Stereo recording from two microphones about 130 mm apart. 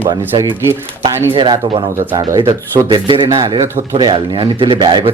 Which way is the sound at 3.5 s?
40° right (ahead or behind).